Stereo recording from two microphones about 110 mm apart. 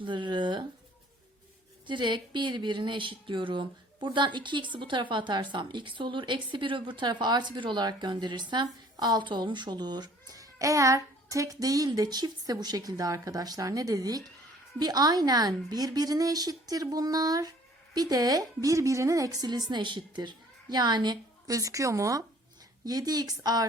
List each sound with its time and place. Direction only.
0.0 s speech: 45° right (ahead or behind)
1.9 s a woman's voice: 45° right (ahead or behind)